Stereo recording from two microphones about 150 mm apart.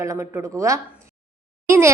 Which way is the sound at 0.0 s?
20° right (ahead or behind).